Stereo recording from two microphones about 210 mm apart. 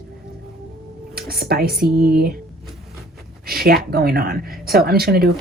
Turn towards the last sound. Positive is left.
turn(degrees=-45)  # may be behind; listen again after turning